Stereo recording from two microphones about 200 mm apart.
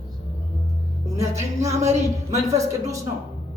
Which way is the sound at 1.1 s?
15° right (ahead or behind).